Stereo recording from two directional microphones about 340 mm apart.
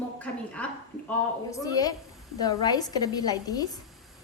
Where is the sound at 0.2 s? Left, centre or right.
Centre.